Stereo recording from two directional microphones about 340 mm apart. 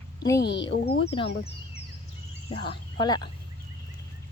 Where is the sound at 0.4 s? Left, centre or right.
Left.